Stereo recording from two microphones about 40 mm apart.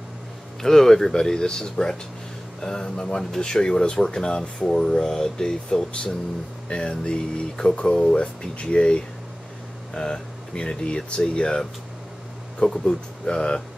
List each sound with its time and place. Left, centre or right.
0.6 s speech: centre